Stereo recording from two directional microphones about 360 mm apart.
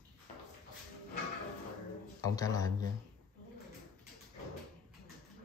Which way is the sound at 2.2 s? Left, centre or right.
Centre.